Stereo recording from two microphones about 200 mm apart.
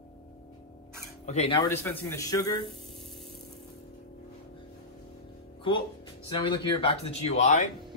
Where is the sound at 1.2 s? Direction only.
30° left (ahead or behind).